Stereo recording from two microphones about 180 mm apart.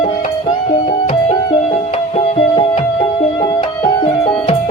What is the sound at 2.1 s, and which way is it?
Music, 30° left (ahead or behind).